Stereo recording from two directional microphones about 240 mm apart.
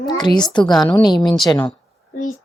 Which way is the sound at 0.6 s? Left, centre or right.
Centre.